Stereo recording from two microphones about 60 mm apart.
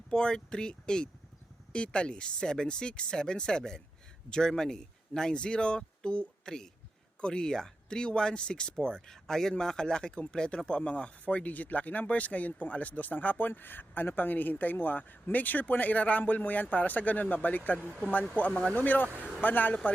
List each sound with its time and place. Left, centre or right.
0.1 s speech: centre; by 17.7 s left
17.7 s speech: right
18.3 s speech: left